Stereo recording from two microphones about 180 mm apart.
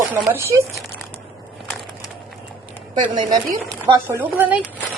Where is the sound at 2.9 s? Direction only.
25° right (ahead or behind).